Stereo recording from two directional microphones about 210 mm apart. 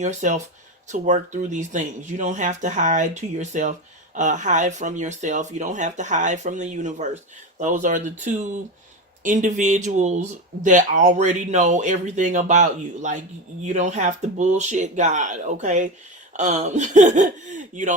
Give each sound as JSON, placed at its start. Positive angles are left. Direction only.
{"t": 0.0, "sound": "speech", "side_deg": -35}